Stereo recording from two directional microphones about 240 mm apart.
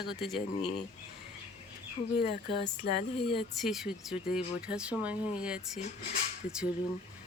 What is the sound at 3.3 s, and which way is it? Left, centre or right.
Speech, centre.